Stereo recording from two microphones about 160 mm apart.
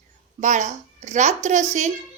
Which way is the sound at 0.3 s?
50° right (ahead or behind).